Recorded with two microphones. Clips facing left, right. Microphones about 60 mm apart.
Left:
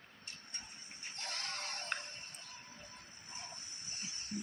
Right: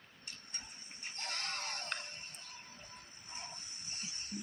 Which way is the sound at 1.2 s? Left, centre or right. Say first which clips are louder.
Right 2 dB; right.